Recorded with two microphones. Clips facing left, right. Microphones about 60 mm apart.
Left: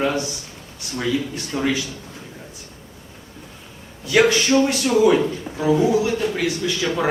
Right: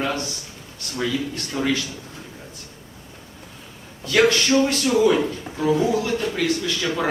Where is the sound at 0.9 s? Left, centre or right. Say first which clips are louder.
Left 2 dB; centre.